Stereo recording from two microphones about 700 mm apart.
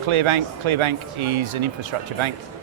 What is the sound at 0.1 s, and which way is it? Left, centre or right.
Speech, right.